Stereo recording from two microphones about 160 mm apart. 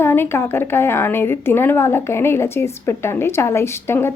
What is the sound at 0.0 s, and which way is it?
A woman's voice, 15° left (ahead or behind).